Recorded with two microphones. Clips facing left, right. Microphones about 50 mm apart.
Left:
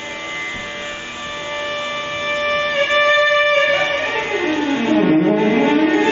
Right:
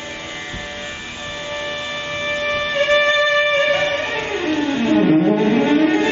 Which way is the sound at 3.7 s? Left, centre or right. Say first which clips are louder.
Left 1 dB; centre.